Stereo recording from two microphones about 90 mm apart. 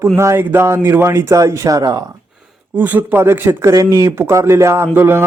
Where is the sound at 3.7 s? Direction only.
35° right (ahead or behind).